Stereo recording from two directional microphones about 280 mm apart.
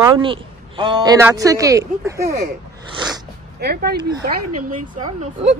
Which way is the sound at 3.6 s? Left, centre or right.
Right.